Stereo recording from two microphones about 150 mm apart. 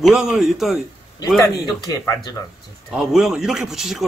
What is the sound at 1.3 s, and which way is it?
Speech, 20° left (ahead or behind).